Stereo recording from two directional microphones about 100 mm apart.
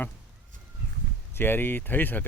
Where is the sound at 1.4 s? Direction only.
20° left (ahead or behind).